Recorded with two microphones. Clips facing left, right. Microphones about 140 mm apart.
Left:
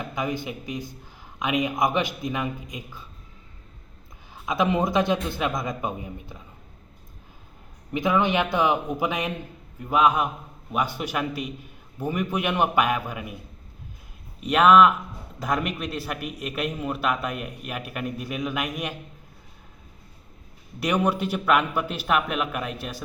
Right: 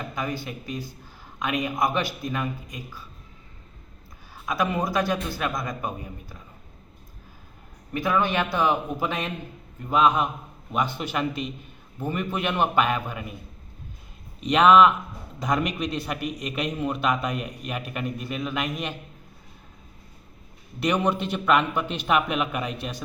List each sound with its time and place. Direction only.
0.1 s a man's voice: 20° left (ahead or behind)
4.4 s a man's voice: 20° left (ahead or behind)
7.9 s a man's voice: 20° left (ahead or behind)
14.4 s a man's voice: 5° left (ahead or behind)
20.7 s a man's voice: 10° left (ahead or behind)